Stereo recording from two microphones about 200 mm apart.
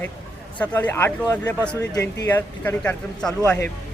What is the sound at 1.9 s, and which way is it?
Speech, 20° left (ahead or behind).